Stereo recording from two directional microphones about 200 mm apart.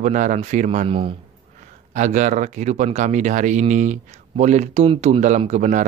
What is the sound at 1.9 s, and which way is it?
Speech, 40° right (ahead or behind).